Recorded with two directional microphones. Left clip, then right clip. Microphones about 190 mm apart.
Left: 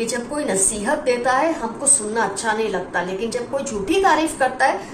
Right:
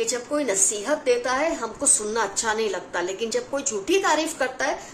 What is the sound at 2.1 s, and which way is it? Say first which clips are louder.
A woman's voice: left 3 dB; 55° right (ahead or behind).